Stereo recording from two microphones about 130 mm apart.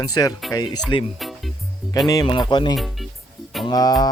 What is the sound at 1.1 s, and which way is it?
Music, centre (ahead or behind).